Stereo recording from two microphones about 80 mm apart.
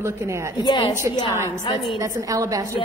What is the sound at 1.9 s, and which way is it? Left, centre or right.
Speech, right.